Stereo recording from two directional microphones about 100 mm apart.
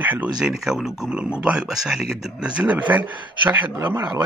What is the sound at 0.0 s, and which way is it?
Speech, 15° right (ahead or behind).